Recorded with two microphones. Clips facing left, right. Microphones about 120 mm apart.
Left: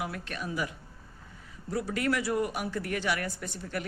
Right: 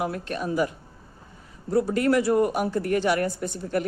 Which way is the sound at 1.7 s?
40° right (ahead or behind).